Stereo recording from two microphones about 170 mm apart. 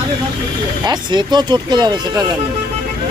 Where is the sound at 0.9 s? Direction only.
25° right (ahead or behind).